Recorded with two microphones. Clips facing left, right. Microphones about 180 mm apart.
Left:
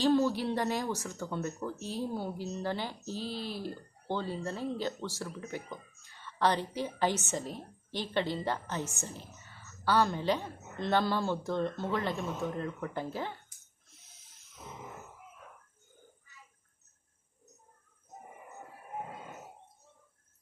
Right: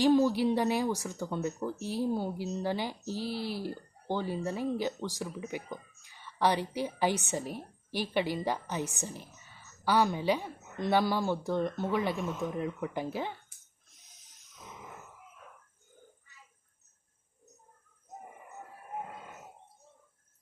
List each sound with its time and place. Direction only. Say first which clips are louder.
0.0 s speech: right 3 dB; 15° right (ahead or behind)
13.9 s snoring: left 2 dB; 15° right (ahead or behind)